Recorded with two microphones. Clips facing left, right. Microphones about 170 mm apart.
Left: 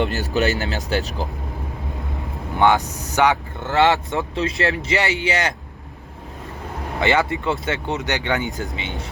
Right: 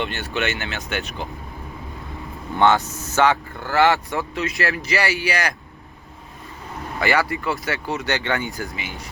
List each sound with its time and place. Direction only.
0.0 s speech: 40° left (ahead or behind)
2.6 s speech: 15° left (ahead or behind)
7.0 s speech: 20° left (ahead or behind)